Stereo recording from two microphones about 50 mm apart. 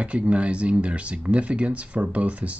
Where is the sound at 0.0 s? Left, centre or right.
Right.